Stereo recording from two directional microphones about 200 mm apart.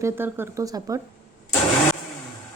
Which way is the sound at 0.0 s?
10° right (ahead or behind).